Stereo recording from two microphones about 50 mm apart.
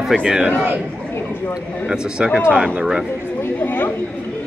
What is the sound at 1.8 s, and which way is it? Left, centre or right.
Speech, centre.